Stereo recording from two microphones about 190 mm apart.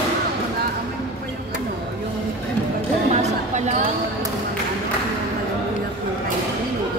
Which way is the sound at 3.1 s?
35° right (ahead or behind).